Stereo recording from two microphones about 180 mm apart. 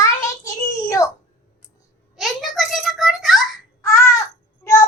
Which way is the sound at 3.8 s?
15° left (ahead or behind).